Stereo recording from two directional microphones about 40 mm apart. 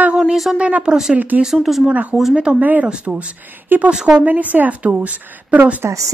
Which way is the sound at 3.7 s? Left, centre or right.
Right.